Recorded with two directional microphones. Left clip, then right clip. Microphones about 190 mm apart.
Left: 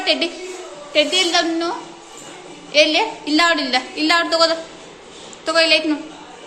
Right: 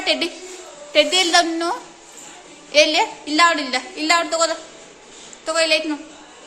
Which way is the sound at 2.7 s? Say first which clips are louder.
Even; 25° right (ahead or behind).